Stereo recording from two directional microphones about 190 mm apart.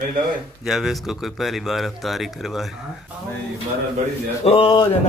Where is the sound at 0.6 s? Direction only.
Centre (ahead or behind).